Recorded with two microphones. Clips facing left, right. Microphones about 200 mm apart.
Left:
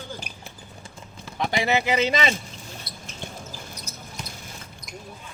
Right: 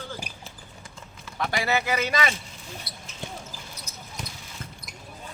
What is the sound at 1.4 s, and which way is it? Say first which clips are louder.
Speech: left 3 dB; 20° left (ahead or behind).